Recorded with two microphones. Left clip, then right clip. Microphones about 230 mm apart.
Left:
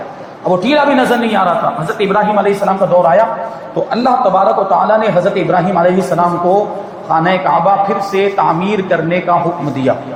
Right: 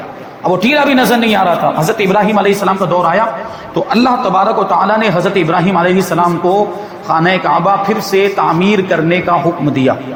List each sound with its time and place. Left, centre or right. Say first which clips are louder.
0.4 s a man's voice: even; right